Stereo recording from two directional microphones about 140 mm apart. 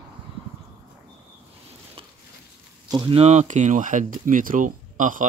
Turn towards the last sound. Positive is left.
turn(degrees=-70)  # may be behind; listen again after turning